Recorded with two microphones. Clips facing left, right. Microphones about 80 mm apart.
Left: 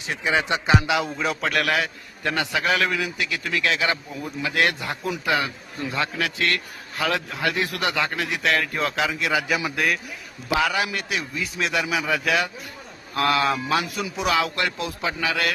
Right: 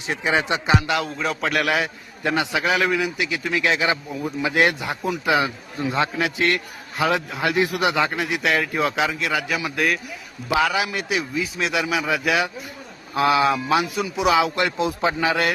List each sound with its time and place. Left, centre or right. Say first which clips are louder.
0.1 s a man's voice: right 1 dB; right
0.7 s a man's voice: left 1 dB; centre; by 15.5 s right